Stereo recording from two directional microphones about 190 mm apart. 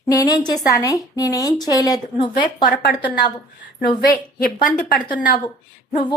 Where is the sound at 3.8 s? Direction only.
50° left (ahead or behind).